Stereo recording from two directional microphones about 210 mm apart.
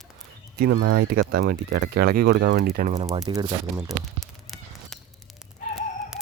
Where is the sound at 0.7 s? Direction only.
90° right.